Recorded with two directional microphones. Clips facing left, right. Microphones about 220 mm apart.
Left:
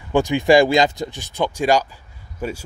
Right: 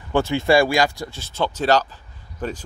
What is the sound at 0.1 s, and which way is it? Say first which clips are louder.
Speech: left 3 dB; 15° left (ahead or behind).